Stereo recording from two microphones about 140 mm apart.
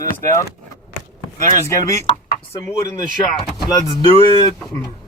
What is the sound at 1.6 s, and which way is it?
Speech, 20° left (ahead or behind).